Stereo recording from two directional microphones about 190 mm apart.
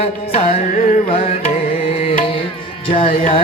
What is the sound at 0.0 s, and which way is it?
Carnatic music, 30° left (ahead or behind).